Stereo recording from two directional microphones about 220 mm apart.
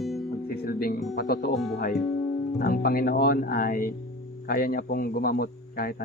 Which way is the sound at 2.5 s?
40° left (ahead or behind).